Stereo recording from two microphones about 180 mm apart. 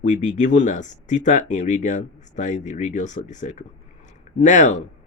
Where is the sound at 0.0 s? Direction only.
45° left (ahead or behind).